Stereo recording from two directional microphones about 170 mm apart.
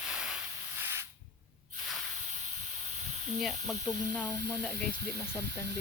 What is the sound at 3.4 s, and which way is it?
Speech, centre (ahead or behind).